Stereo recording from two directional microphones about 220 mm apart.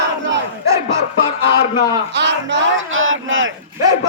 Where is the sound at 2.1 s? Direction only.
55° right (ahead or behind).